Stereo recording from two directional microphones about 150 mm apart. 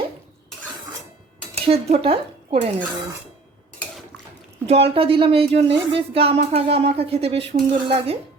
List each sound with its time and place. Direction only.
1.5 s dishes: 40° right (ahead or behind)
4.6 s a woman's voice: 40° right (ahead or behind)